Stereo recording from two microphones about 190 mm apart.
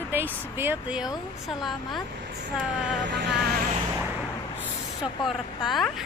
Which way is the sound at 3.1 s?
65° right (ahead or behind).